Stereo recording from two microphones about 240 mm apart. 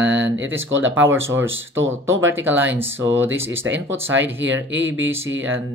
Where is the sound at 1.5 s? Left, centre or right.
Right.